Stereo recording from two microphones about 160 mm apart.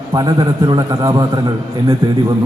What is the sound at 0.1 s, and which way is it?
A man's voice, 25° right (ahead or behind).